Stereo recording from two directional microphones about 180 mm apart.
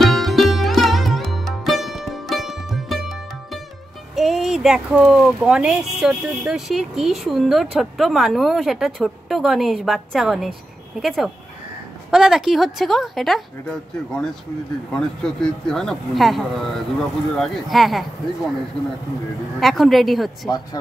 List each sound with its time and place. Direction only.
0.0 s music: centre (ahead or behind)
4.1 s speech: centre (ahead or behind)
19.6 s speech: centre (ahead or behind)
20.4 s speech: 20° left (ahead or behind)